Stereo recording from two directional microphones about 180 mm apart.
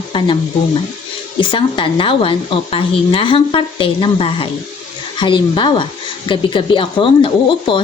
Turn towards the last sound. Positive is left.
turn(degrees=30)  # may be behind; listen again after turning